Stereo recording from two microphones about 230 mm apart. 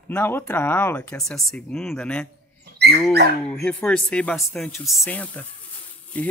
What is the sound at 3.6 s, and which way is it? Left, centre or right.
Speech, centre.